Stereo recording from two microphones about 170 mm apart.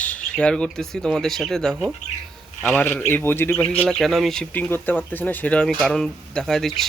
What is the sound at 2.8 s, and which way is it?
Speech, 10° left (ahead or behind).